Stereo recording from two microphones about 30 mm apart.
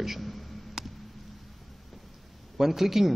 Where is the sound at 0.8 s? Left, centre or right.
Centre.